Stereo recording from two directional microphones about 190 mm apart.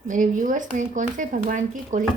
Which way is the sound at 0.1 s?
45° right (ahead or behind).